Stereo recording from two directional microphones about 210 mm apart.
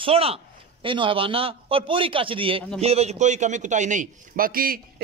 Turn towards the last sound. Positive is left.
turn(degrees=-45)  # may be behind; listen again after turning